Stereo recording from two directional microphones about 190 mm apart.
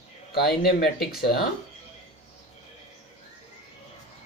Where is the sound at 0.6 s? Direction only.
55° left (ahead or behind).